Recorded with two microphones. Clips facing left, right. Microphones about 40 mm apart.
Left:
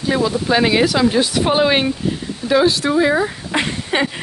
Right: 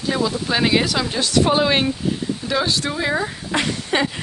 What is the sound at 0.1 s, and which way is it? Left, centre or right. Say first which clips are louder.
Speech: left 6 dB; centre.